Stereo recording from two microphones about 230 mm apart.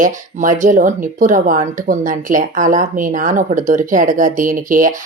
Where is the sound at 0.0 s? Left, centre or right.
Right.